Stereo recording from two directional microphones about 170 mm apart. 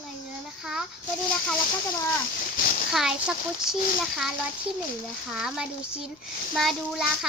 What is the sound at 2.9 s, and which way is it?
Speech, centre (ahead or behind).